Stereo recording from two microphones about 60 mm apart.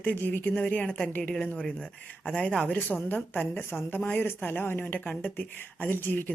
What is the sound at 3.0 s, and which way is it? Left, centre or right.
Speech, left.